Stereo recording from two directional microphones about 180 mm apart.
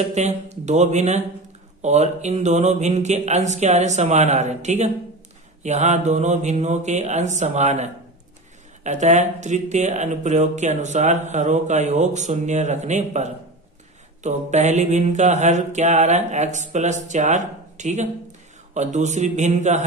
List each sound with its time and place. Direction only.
0.1 s speech: 40° right (ahead or behind)